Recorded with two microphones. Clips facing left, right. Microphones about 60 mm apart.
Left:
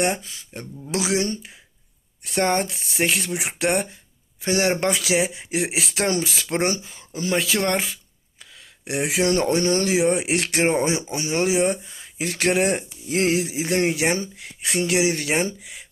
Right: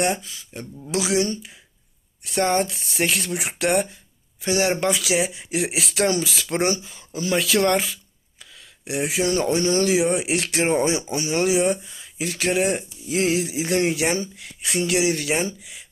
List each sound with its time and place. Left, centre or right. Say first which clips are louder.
0.0 s speech: even; left
4.4 s speech: even; left
5.1 s speech: left 1 dB; left
8.8 s speech: even; left
9.0 s speech: left 1 dB; left
10.6 s speech: right 1 dB; left
11.9 s a sound: even; left
12.2 s speech: left 1 dB; left